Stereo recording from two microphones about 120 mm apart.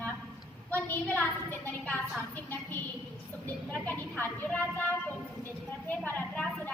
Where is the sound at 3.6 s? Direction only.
15° left (ahead or behind).